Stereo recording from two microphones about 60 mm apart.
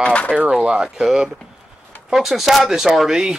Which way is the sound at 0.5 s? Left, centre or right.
Centre.